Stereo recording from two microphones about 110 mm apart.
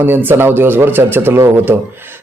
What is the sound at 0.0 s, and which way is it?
Speech, 20° right (ahead or behind).